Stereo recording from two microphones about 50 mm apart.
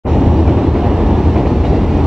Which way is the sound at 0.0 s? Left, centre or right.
Centre.